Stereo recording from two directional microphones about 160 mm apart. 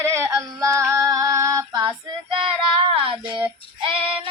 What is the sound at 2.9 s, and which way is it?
Child singing, 35° right (ahead or behind).